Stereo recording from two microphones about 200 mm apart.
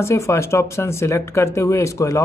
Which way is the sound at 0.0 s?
15° left (ahead or behind).